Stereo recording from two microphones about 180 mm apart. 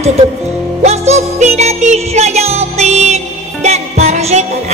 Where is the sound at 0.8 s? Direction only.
35° right (ahead or behind).